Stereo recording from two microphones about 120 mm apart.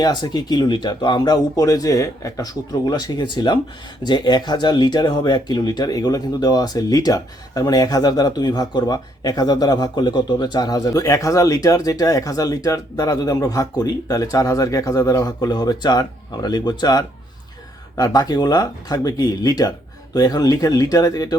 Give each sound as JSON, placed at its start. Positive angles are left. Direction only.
{"t": 0.0, "sound": "speech", "side_deg": 35}